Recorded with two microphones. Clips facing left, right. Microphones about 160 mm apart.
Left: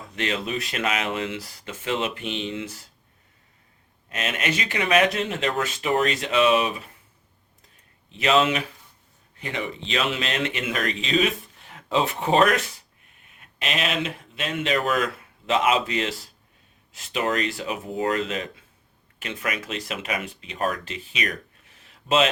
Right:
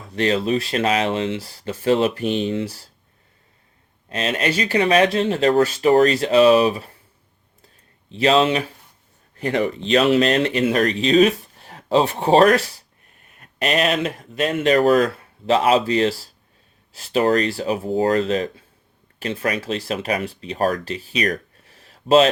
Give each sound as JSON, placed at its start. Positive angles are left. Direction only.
{"t": 0.1, "sound": "speech", "side_deg": -35}
{"t": 4.1, "sound": "speech", "side_deg": -35}
{"t": 8.1, "sound": "speech", "side_deg": -30}
{"t": 9.4, "sound": "speech", "side_deg": -40}